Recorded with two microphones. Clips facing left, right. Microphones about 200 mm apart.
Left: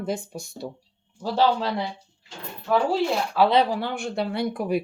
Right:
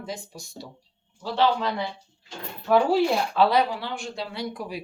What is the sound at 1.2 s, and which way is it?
Speech, 40° left (ahead or behind).